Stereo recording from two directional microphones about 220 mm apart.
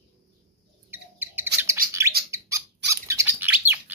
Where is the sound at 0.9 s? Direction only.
10° right (ahead or behind).